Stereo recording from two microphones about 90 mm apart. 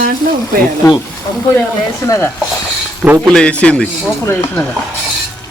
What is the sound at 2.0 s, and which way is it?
Speech, 30° left (ahead or behind).